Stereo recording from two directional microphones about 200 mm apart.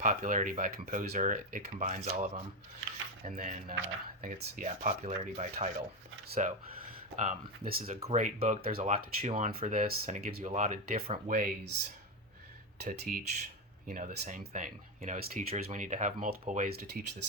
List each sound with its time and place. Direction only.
0.0 s speech: 40° right (ahead or behind)
12.8 s speech: 45° right (ahead or behind)